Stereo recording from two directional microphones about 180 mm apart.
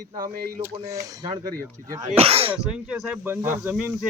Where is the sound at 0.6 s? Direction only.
15° right (ahead or behind).